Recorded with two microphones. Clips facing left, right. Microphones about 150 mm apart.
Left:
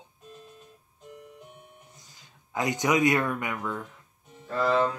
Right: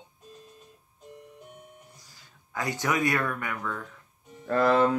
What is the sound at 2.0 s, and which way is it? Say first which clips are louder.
Speech: even; 20° left (ahead or behind).